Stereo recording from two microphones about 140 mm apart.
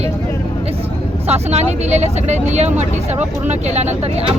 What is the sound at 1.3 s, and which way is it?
Speech, 50° right (ahead or behind).